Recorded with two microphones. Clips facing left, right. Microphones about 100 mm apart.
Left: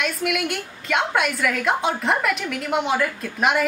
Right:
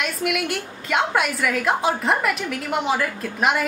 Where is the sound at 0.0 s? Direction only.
Centre (ahead or behind).